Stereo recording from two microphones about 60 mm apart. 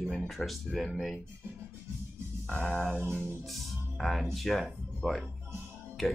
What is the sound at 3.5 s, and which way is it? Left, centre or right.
Speech, centre.